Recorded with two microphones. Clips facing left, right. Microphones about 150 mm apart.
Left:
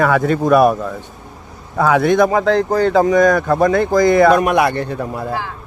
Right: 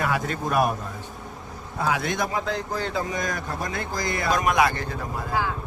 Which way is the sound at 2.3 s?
70° left (ahead or behind).